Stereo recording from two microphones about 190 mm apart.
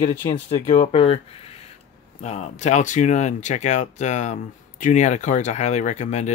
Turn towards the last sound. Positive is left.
turn(degrees=35)  # may be behind; listen again after turning